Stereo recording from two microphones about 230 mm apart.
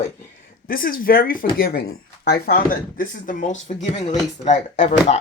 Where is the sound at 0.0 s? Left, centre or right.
Left.